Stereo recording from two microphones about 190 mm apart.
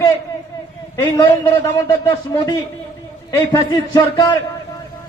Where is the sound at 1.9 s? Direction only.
20° left (ahead or behind).